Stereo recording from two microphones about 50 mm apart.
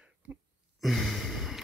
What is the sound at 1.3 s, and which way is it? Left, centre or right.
Music, centre.